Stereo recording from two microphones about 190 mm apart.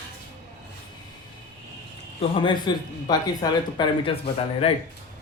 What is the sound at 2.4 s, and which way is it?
A man's voice, 25° left (ahead or behind).